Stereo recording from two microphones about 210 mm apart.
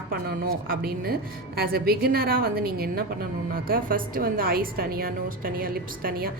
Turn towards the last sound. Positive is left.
turn(degrees=-45)  # may be behind; listen again after turning